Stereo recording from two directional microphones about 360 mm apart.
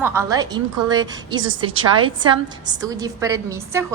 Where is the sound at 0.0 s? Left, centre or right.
Centre.